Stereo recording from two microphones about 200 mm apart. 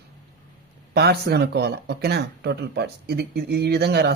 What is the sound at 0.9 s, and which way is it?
Speech, 55° right (ahead or behind).